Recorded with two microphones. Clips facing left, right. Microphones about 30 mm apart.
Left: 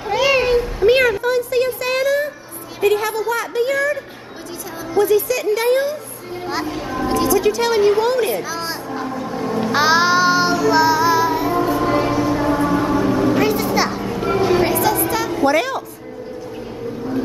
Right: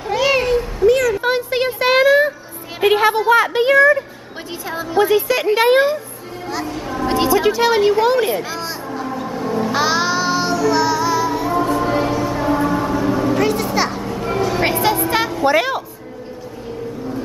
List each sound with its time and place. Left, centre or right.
0.0 s a sound: centre
0.8 s a sound: left
1.2 s a sound: right
4.9 s a woman's voice: right
6.4 s speech: centre
7.1 s speech: right
8.5 s music: centre
9.1 s child singing: centre
14.6 s music: right
15.4 s a woman's voice: centre